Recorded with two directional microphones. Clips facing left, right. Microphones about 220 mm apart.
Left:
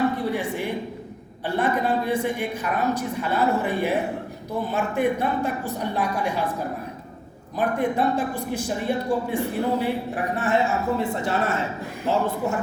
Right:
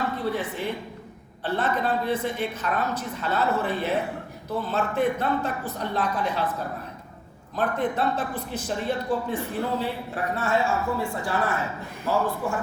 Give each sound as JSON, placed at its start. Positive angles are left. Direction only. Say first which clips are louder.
{"t": 0.2, "sound": "a woman's voice", "louder": "left 2 dB", "side_deg": 15}
{"t": 7.5, "sound": "a woman's voice", "louder": "left 3 dB", "side_deg": 15}